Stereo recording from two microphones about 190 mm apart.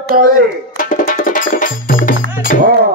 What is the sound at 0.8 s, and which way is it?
Music, 45° left (ahead or behind).